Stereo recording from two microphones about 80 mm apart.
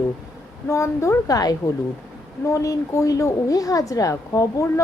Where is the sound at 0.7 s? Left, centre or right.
Left.